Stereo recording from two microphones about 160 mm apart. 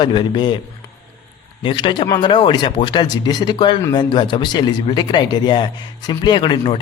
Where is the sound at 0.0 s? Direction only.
30° left (ahead or behind).